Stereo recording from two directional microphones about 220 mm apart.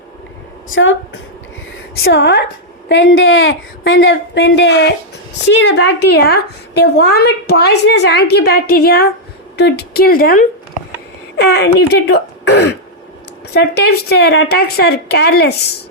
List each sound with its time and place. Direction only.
0.7 s a woman's voice: 60° left (ahead or behind)
2.0 s a woman's voice: 50° left (ahead or behind)
11.4 s a woman's voice: 45° left (ahead or behind)